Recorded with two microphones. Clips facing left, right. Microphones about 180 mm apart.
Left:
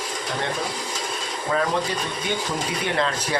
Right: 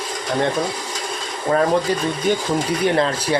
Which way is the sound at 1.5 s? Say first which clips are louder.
Right 6 dB; 40° right (ahead or behind).